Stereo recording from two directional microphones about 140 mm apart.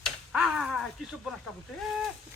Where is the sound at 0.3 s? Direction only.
Centre (ahead or behind).